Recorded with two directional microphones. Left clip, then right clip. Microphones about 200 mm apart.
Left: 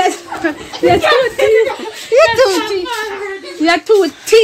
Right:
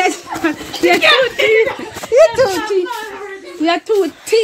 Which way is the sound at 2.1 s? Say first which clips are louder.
Left 1 dB; 10° right (ahead or behind).